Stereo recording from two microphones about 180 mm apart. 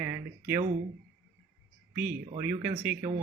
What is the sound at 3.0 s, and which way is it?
Speech, 40° right (ahead or behind).